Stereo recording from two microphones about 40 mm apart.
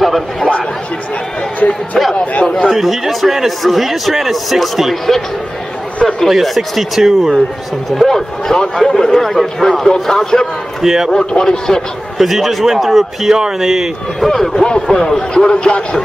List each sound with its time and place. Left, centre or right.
0.0 s a sound: centre
2.4 s a man's voice: centre
2.7 s a man's voice: centre
6.4 s a man's voice: centre
7.9 s a man's voice: centre
10.8 s a man's voice: centre
11.1 s a man's voice: centre
12.2 s speech: centre
14.2 s a man's voice: centre
14.6 s a man's voice: centre